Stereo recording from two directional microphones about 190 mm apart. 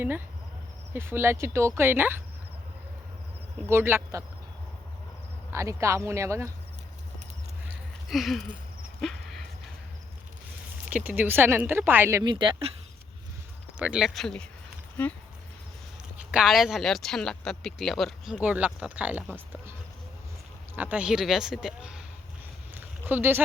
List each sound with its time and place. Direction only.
0.9 s speech: 10° right (ahead or behind)
3.7 s speech: 10° right (ahead or behind)
5.5 s speech: 15° right (ahead or behind)
8.0 s speech: centre (ahead or behind)
9.0 s a sound: centre (ahead or behind)
10.8 s speech: 10° right (ahead or behind); by 12.7 s 25° right (ahead or behind)
13.7 s speech: 5° right (ahead or behind)
16.3 s speech: centre (ahead or behind)
20.7 s speech: 10° right (ahead or behind)
22.7 s a sound: 10° right (ahead or behind)